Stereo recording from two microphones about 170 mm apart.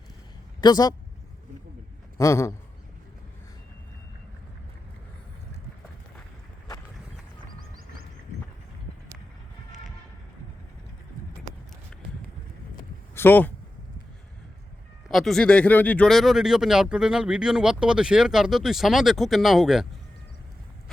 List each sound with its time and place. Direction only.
0.6 s speech: 25° left (ahead or behind)
2.1 s a man's voice: 15° left (ahead or behind)
13.1 s speech: 10° left (ahead or behind)
15.1 s speech: centre (ahead or behind)